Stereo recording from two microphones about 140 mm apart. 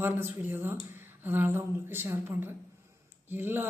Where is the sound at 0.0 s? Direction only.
15° right (ahead or behind).